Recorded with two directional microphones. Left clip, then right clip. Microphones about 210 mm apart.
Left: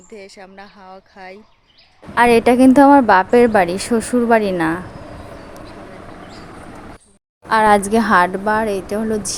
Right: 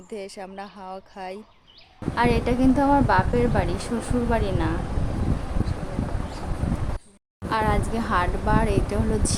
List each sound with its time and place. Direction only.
0.1 s speech: 20° right (ahead or behind)
2.1 s a woman's voice: 35° left (ahead or behind)
7.5 s a woman's voice: 35° left (ahead or behind)